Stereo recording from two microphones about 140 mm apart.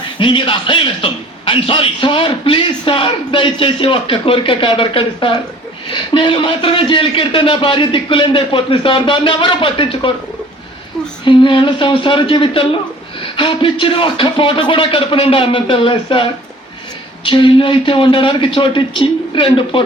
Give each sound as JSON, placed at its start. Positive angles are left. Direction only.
{"t": 0.2, "sound": "a man's voice", "side_deg": 35}
{"t": 11.3, "sound": "a man's voice", "side_deg": 35}